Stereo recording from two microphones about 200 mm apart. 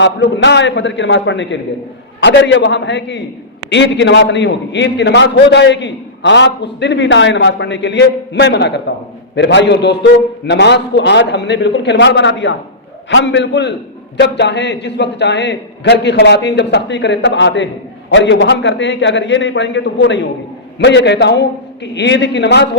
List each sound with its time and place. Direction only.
0.0 s a man's voice: 60° left (ahead or behind)